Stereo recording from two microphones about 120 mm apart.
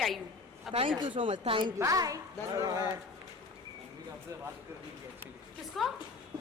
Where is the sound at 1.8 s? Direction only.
25° right (ahead or behind).